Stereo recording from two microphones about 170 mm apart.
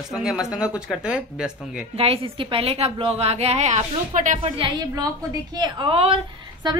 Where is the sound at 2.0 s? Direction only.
35° right (ahead or behind).